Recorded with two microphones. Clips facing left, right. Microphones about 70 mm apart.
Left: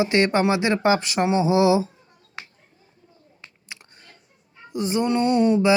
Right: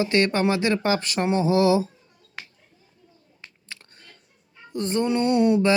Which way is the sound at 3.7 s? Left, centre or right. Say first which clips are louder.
Left 2 dB; centre.